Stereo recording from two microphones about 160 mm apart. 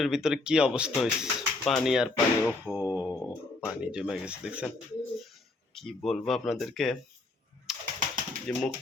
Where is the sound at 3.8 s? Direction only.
5° right (ahead or behind).